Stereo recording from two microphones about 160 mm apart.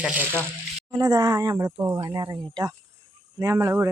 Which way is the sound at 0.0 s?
10° right (ahead or behind).